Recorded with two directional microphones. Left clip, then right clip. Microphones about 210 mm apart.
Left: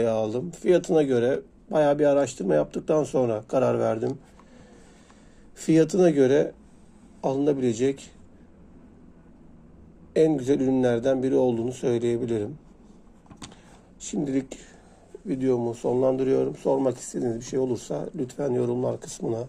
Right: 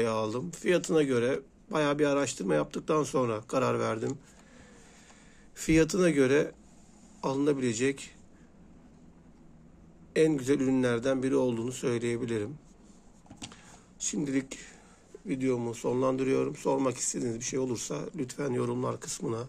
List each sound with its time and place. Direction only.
0.0 s speech: 20° right (ahead or behind)
5.6 s speech: 20° right (ahead or behind)
10.1 s speech: 20° right (ahead or behind)
13.5 s a sound: 20° right (ahead or behind)
15.2 s speech: 20° right (ahead or behind)